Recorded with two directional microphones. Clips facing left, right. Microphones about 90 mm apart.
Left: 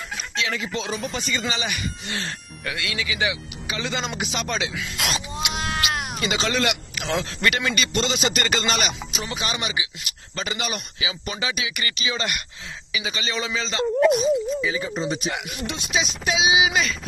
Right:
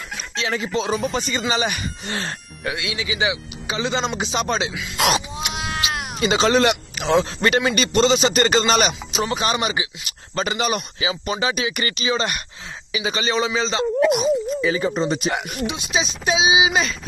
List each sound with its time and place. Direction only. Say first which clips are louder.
0.4 s speech: right 4 dB; 35° right (ahead or behind)
2.6 s speech: right 2 dB; 20° right (ahead or behind)
5.5 s cat: even; centre (ahead or behind)
6.2 s speech: right 7 dB; 35° right (ahead or behind)
14.6 s speech: right 5 dB; 60° right (ahead or behind)
15.2 s speech: right 5 dB; 40° right (ahead or behind)
15.6 s speech: even; 15° right (ahead or behind)